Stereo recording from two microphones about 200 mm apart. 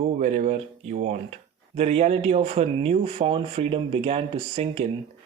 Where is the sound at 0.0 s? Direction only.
35° right (ahead or behind).